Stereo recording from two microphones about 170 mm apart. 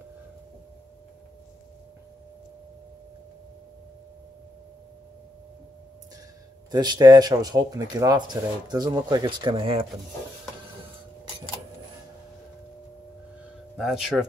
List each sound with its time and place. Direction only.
6.7 s speech: 25° right (ahead or behind)
13.7 s speech: 5° right (ahead or behind)